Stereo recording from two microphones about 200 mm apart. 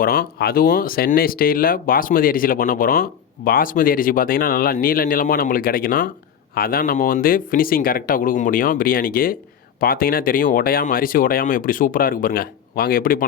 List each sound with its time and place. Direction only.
0.0 s speech: 50° left (ahead or behind)